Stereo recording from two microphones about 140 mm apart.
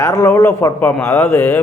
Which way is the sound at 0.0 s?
25° left (ahead or behind).